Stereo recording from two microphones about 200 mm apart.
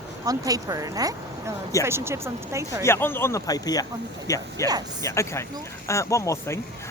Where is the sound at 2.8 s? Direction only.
10° left (ahead or behind).